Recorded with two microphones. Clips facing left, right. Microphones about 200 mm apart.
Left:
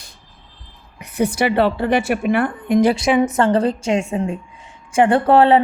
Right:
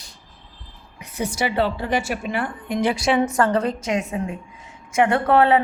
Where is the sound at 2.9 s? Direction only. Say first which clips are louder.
Left 3 dB; 20° left (ahead or behind).